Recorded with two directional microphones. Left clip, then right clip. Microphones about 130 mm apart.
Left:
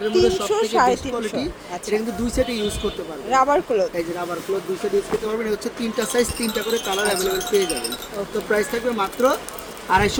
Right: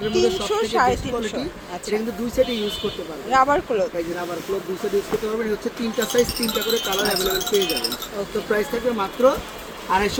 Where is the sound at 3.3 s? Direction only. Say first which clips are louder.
Even; 20° left (ahead or behind).